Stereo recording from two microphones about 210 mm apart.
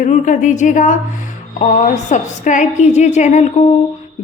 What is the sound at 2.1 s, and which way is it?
A woman's voice, 35° left (ahead or behind).